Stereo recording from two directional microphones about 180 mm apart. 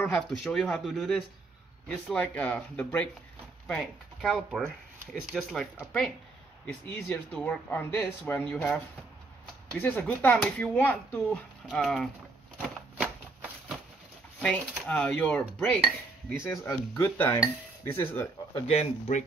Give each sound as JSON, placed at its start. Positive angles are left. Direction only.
{"t": 0.0, "sound": "speech", "side_deg": 5}
{"t": 6.6, "sound": "speech", "side_deg": 15}
{"t": 13.0, "sound": "shuffling cards", "side_deg": -5}
{"t": 14.4, "sound": "speech", "side_deg": 5}
{"t": 18.7, "sound": "speech", "side_deg": 35}